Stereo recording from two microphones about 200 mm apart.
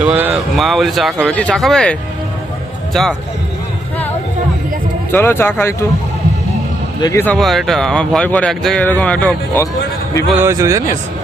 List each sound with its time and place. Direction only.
0.0 s speech: 10° right (ahead or behind)
5.1 s speech: 10° left (ahead or behind)
7.0 s speech: 15° left (ahead or behind)
10.4 s speech: 15° right (ahead or behind)